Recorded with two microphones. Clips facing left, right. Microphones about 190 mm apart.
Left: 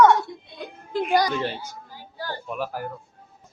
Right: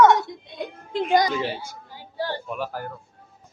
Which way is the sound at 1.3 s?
5° right (ahead or behind).